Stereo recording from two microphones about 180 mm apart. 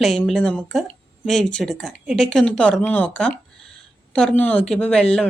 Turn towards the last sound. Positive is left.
turn(degrees=5)  # may be behind; listen again after turning